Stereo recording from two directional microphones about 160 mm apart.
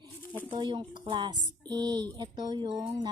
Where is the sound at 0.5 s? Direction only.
30° right (ahead or behind).